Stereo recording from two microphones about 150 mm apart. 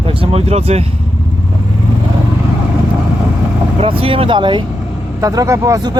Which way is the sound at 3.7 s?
40° right (ahead or behind).